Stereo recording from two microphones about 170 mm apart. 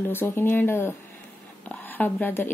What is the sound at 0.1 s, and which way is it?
A woman's voice, 10° left (ahead or behind).